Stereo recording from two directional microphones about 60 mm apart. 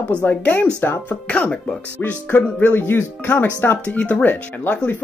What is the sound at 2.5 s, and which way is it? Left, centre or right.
Speech, left.